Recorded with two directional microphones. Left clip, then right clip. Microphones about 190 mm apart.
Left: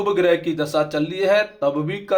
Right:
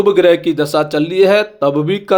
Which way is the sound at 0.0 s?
45° right (ahead or behind).